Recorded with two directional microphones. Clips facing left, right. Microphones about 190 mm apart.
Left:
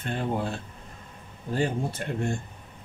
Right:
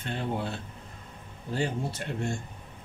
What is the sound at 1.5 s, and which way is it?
Speech, 55° left (ahead or behind).